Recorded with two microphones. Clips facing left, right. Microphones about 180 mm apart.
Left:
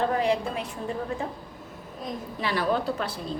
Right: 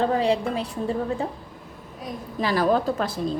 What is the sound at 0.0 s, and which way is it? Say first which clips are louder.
A woman's voice: right 3 dB; 30° right (ahead or behind).